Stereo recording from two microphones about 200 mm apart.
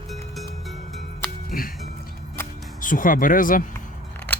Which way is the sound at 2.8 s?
40° left (ahead or behind).